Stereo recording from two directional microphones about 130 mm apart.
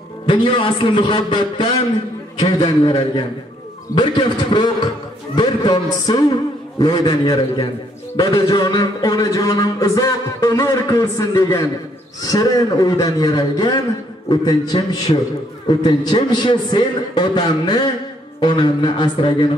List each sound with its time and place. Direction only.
0.3 s a man's voice: 40° left (ahead or behind)
3.9 s a man's voice: 35° left (ahead or behind)